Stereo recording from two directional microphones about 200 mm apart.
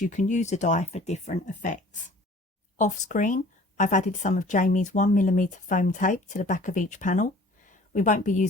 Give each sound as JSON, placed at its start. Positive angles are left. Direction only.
{"t": 0.0, "sound": "speech", "side_deg": 40}